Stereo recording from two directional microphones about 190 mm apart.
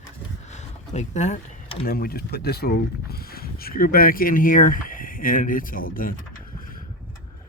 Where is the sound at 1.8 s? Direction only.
55° left (ahead or behind).